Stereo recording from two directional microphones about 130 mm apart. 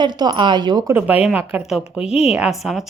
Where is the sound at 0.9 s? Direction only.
10° right (ahead or behind).